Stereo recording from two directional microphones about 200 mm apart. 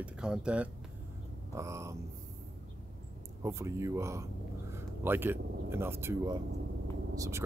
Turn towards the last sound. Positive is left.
turn(degrees=-15)  # may be behind; listen again after turning